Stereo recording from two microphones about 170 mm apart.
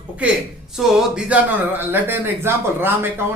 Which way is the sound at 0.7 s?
5° right (ahead or behind).